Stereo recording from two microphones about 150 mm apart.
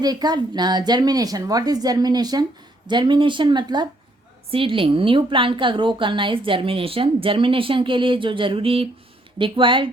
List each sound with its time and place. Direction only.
0.0 s a woman's voice: 25° right (ahead or behind)